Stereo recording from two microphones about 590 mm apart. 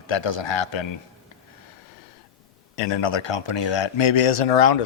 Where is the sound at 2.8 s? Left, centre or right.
Left.